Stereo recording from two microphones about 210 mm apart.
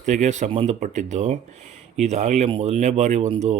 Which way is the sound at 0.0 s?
35° right (ahead or behind).